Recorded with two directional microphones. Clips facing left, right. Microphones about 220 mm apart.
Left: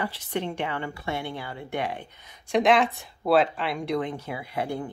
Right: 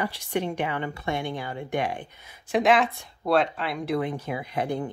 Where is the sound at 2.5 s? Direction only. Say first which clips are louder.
Even; centre (ahead or behind).